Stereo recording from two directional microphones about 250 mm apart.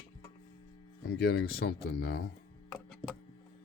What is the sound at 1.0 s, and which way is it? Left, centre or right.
Speech, left.